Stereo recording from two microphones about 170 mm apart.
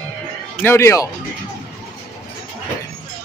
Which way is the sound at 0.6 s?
15° left (ahead or behind).